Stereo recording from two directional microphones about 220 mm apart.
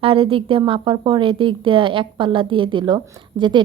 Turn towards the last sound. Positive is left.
turn(degrees=-20)  # may be behind; listen again after turning